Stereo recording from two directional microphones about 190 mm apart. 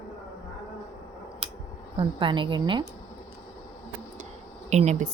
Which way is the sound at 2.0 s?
25° right (ahead or behind).